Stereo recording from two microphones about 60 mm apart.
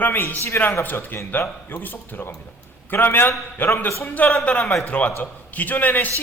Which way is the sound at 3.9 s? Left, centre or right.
Left.